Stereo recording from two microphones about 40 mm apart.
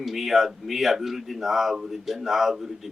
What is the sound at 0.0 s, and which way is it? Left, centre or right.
A man's voice, centre.